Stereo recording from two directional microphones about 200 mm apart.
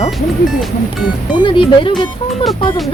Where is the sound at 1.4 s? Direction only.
25° left (ahead or behind).